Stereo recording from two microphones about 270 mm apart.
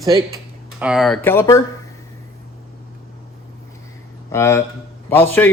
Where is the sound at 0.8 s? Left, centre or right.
Centre.